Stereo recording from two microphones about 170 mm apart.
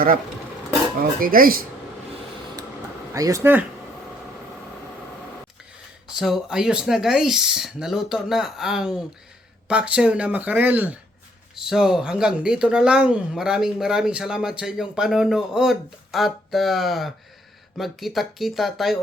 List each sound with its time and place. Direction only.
1.2 s speech: 55° right (ahead or behind)
3.1 s speech: 20° right (ahead or behind)
6.1 s speech: centre (ahead or behind)